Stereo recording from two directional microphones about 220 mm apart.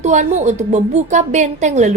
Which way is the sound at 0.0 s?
35° right (ahead or behind).